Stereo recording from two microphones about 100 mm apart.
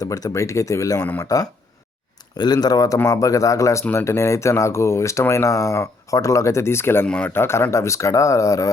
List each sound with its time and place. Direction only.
0.0 s speech: 35° left (ahead or behind)
7.1 s speech: 10° left (ahead or behind)
7.3 s speech: 25° left (ahead or behind)